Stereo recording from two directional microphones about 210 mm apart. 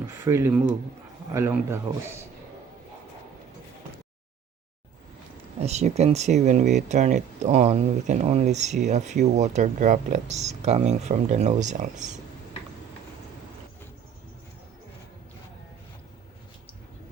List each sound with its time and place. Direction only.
0.1 s speech: 10° right (ahead or behind)
5.5 s speech: 30° right (ahead or behind)